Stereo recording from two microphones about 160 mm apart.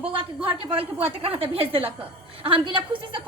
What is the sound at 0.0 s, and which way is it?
A woman's voice, 35° right (ahead or behind).